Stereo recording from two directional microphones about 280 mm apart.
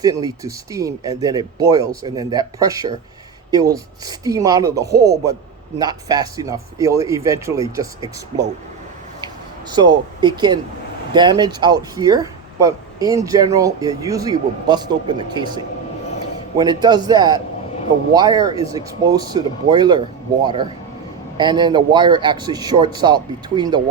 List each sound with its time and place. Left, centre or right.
0.0 s speech: centre
9.7 s speech: centre